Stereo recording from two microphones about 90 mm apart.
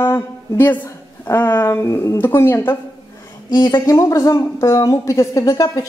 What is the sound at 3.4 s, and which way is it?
Speech, 50° left (ahead or behind).